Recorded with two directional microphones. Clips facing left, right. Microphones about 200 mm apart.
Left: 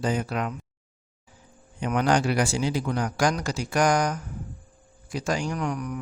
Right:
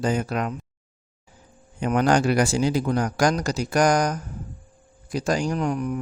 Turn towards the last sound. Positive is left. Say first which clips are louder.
# right 4 dB
turn(degrees=-25)  # may be behind; listen again after turning